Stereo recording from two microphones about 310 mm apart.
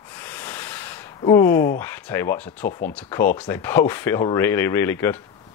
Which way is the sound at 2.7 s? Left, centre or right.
Left.